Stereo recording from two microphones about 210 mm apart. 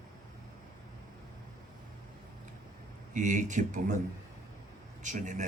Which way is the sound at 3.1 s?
35° right (ahead or behind).